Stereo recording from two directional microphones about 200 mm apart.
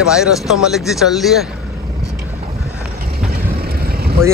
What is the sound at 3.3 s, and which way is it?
Boat, 50° right (ahead or behind).